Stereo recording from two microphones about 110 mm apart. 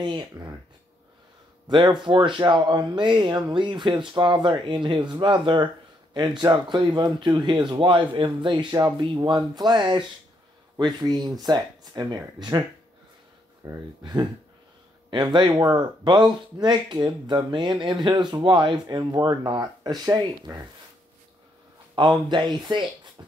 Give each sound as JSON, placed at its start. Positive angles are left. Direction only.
{"t": 0.0, "sound": "speech", "side_deg": -45}
{"t": 1.7, "sound": "speech", "side_deg": -45}
{"t": 13.7, "sound": "speech", "side_deg": -35}
{"t": 22.3, "sound": "speech", "side_deg": -45}